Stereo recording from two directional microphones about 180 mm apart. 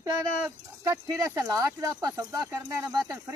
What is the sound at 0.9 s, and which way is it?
Speech, 20° right (ahead or behind).